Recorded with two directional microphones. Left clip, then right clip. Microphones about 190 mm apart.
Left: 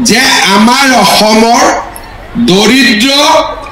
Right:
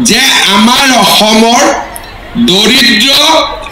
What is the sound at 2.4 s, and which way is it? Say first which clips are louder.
Speech: even; 30° right (ahead or behind).